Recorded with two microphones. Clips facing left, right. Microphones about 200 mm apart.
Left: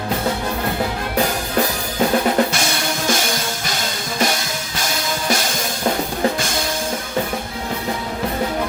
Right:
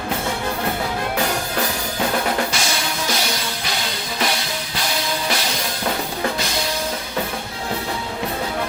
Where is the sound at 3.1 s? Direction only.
50° left (ahead or behind).